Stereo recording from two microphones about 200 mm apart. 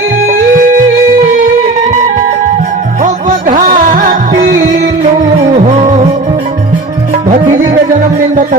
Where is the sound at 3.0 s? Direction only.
40° right (ahead or behind).